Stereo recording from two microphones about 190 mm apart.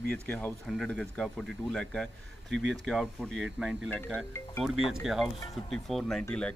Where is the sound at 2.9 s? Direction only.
5° left (ahead or behind).